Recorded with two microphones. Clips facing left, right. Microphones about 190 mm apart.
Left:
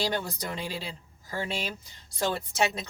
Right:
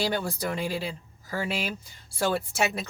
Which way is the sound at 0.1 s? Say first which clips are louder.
Right 3 dB; 10° right (ahead or behind).